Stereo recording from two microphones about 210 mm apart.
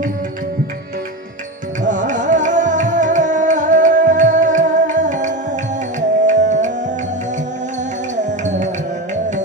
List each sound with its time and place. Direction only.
1.8 s music: 35° right (ahead or behind)